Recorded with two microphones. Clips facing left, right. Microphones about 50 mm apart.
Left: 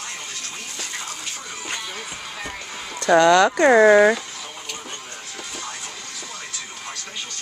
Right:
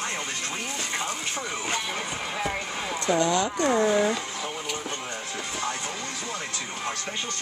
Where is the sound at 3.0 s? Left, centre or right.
Left.